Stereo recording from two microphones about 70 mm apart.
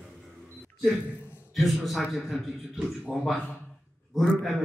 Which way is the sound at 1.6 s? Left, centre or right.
Centre.